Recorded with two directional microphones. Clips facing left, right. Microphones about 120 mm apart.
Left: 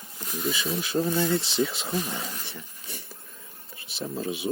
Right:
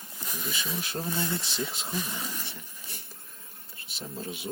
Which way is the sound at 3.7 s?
90° left.